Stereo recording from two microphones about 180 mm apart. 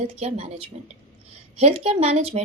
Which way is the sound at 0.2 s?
35° right (ahead or behind).